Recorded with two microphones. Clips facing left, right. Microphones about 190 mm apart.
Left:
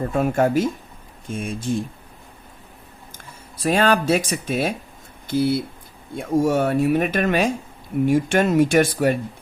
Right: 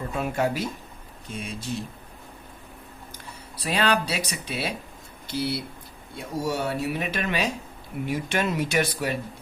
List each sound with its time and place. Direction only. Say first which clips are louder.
0.0 s speech: left 7 dB; 50° left (ahead or behind)
3.6 s speech: left 6 dB; 45° left (ahead or behind)